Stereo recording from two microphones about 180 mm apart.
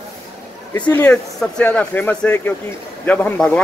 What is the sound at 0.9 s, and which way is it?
Speech, 5° left (ahead or behind).